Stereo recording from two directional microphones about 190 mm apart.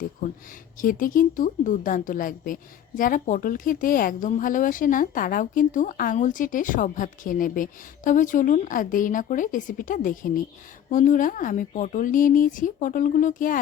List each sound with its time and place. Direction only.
0.8 s a woman's voice: 45° left (ahead or behind)